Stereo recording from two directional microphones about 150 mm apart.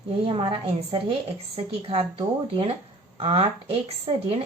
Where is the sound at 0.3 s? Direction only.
35° right (ahead or behind).